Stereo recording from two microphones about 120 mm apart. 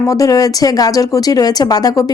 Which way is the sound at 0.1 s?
30° left (ahead or behind).